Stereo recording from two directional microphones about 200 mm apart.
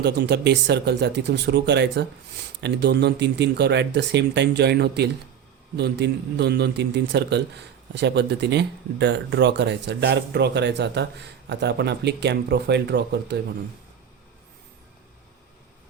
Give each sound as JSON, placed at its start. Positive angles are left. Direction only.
{"t": 0.0, "sound": "a man's voice", "side_deg": -55}